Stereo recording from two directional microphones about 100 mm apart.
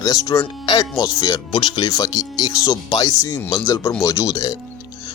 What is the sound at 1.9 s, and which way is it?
Speech, 35° left (ahead or behind).